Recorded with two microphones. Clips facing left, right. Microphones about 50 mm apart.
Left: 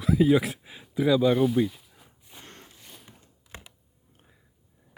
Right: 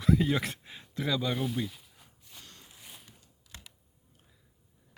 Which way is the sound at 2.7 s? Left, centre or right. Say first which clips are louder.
Left 2 dB; centre.